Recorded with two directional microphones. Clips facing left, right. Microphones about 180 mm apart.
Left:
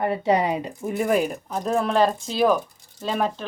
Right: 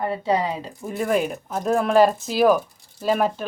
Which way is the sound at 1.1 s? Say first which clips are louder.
Right 1 dB; centre (ahead or behind).